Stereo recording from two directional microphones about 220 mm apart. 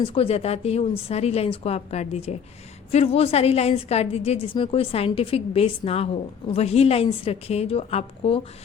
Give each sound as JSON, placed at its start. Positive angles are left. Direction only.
{"t": 0.0, "sound": "a woman's voice", "side_deg": 25}